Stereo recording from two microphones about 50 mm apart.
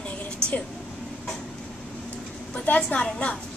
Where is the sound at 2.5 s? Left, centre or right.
Left.